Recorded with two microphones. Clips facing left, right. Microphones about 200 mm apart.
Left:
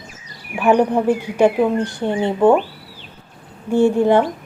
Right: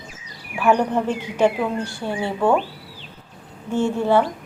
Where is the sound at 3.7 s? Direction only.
15° left (ahead or behind).